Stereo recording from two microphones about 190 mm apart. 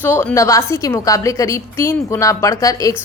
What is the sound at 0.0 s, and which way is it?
A woman's voice, 10° left (ahead or behind).